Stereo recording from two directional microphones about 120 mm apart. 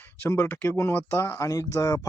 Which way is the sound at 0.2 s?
15° left (ahead or behind).